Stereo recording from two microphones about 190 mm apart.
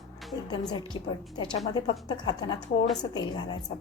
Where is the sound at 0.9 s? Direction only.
25° left (ahead or behind).